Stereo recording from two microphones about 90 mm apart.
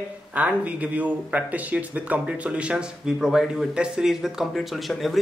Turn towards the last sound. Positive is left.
turn(degrees=0)  # may be behind; listen again after turning